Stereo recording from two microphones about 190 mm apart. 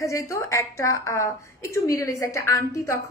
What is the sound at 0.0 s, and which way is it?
A woman's voice, 15° left (ahead or behind).